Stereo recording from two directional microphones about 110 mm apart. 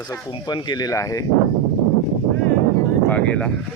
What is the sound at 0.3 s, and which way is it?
Speech, 40° left (ahead or behind).